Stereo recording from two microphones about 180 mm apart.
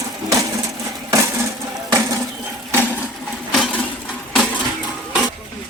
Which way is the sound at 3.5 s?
5° left (ahead or behind).